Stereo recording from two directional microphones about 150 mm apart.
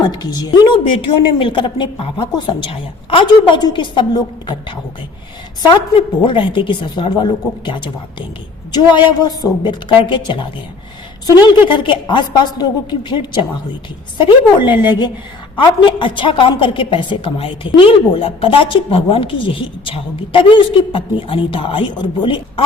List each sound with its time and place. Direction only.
0.0 s a woman's voice: 25° left (ahead or behind)
6.2 s a woman's voice: 35° left (ahead or behind)
11.7 s a woman's voice: 35° left (ahead or behind)